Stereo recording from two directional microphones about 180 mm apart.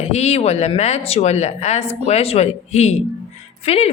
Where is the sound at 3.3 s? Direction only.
35° left (ahead or behind).